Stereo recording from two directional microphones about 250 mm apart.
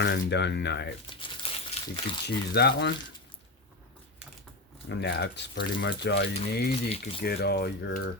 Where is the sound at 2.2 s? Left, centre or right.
Left.